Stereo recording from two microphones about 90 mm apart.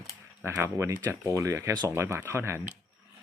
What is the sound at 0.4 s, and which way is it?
Speech, 30° right (ahead or behind).